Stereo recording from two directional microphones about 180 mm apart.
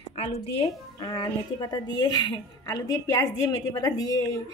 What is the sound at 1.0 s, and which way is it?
A woman's voice, 25° left (ahead or behind).